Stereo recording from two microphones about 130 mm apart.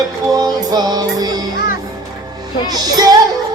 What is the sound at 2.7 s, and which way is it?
Music, 30° right (ahead or behind).